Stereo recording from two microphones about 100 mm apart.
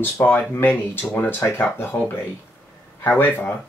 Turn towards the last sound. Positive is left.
turn(degrees=20)  # may be behind; listen again after turning